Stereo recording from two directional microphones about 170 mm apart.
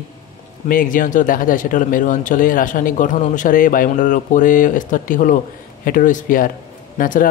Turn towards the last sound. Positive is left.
turn(degrees=55)  # may be behind; listen again after turning